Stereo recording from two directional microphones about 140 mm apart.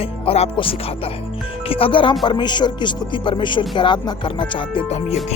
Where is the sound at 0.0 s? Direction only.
45° left (ahead or behind).